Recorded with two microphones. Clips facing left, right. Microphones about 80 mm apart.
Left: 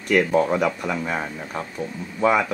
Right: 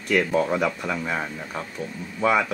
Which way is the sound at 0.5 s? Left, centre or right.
Centre.